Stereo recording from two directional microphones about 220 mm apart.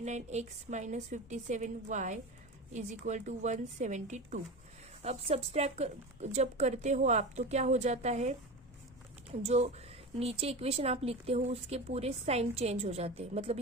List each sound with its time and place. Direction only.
0.0 s a woman's voice: 30° right (ahead or behind)